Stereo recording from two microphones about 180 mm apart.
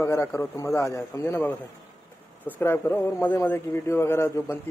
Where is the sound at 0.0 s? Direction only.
15° left (ahead or behind).